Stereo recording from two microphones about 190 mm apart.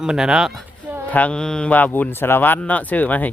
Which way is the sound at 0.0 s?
5° right (ahead or behind).